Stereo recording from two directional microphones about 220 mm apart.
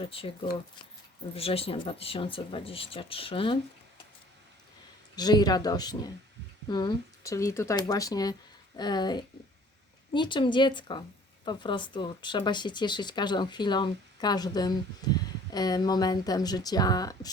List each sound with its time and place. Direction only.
0.0 s speech: 25° left (ahead or behind)
1.4 s speech: 25° left (ahead or behind)
5.1 s speech: 20° left (ahead or behind)